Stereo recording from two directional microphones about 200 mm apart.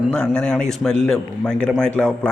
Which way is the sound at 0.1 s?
5° left (ahead or behind).